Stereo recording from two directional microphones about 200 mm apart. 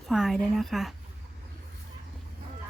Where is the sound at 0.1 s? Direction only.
Centre (ahead or behind).